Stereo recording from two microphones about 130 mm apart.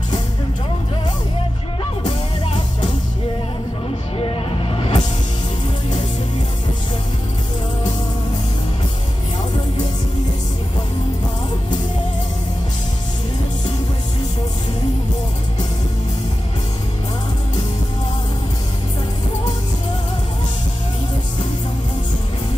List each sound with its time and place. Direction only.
2.0 s music: 40° left (ahead or behind)
4.2 s music: 45° left (ahead or behind)